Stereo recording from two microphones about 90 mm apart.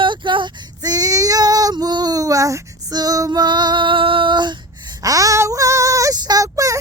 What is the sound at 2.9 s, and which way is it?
Female singing, 45° right (ahead or behind).